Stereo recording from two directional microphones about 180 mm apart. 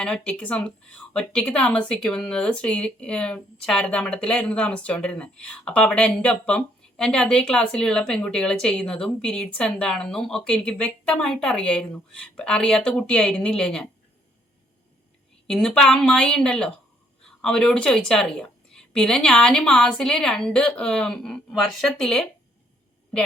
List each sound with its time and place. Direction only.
0.0 s speech: 5° left (ahead or behind)
15.4 s speech: 5° left (ahead or behind)